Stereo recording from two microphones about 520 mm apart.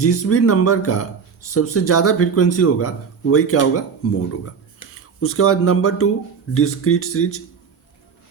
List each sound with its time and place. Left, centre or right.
0.0 s speech: left